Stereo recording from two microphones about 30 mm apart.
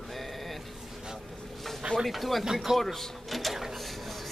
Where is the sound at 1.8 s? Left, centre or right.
Right.